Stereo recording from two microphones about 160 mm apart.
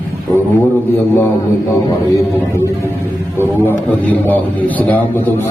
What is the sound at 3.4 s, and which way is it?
A man's voice, 10° left (ahead or behind).